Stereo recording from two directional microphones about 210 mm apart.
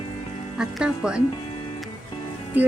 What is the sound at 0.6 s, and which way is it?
Speech, 5° right (ahead or behind).